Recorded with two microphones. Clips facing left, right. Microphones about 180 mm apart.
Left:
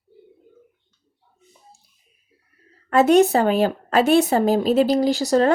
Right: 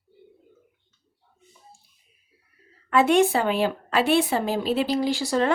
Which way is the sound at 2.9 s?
40° left (ahead or behind).